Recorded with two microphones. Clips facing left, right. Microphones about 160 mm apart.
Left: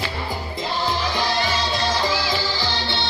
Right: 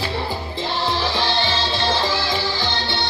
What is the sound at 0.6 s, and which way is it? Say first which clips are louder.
Music: right 1 dB; 25° right (ahead or behind).